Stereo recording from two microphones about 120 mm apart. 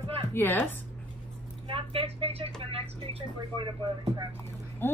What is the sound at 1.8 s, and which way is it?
Speech, 55° right (ahead or behind).